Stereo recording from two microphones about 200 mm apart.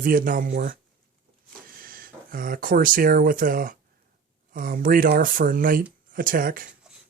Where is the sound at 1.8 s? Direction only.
45° right (ahead or behind).